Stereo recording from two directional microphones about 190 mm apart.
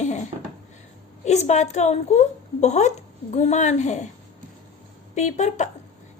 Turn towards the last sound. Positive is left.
turn(degrees=35)  # may be behind; listen again after turning